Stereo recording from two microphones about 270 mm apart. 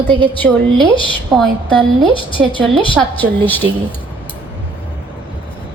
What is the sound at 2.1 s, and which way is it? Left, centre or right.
Speech, centre.